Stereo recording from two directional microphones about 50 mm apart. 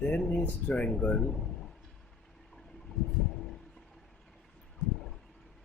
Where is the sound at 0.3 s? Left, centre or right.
Left.